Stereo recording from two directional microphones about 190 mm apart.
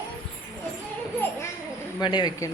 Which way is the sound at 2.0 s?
25° left (ahead or behind).